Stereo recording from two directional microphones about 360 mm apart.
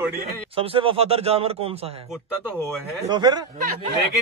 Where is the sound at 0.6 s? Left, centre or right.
Centre.